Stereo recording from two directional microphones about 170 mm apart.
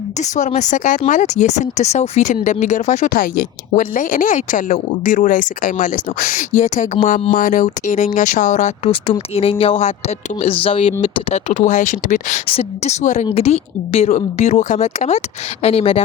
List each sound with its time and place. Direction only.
0.2 s speech: 45° left (ahead or behind)
7.3 s speech: 50° left (ahead or behind)
12.5 s speech: 35° left (ahead or behind)